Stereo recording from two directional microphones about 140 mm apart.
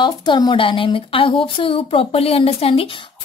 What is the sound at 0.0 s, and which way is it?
Speech, 35° left (ahead or behind).